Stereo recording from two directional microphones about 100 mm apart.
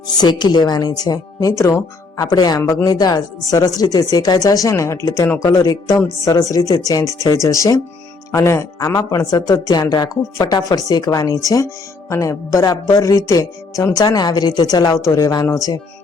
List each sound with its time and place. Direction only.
0.2 s speech: 45° left (ahead or behind)